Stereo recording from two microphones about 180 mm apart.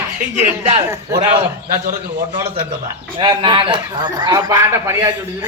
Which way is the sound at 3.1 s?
30° right (ahead or behind).